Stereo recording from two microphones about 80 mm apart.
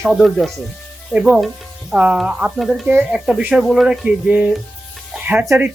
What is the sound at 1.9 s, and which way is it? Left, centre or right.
Speech, centre.